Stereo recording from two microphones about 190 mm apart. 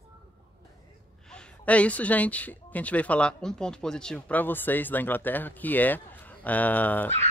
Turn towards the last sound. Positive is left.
turn(degrees=10)  # may be behind; listen again after turning